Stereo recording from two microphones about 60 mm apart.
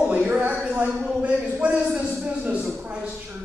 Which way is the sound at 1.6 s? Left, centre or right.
Right.